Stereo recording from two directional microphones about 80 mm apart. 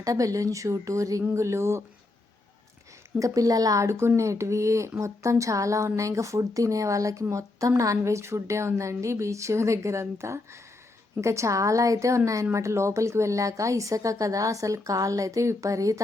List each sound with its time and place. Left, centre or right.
0.0 s speech: right
3.2 s speech: right